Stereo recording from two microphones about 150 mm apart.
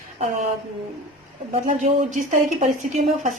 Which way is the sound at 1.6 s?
60° right (ahead or behind).